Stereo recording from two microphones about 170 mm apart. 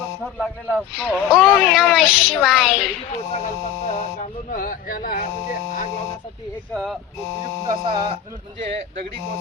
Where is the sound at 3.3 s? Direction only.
40° left (ahead or behind).